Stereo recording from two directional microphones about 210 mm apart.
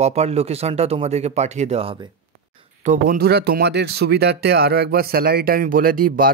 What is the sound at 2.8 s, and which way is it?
Speech, 40° right (ahead or behind).